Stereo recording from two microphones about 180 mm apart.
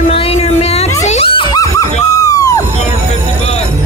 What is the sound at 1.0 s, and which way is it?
Screaming, 35° left (ahead or behind).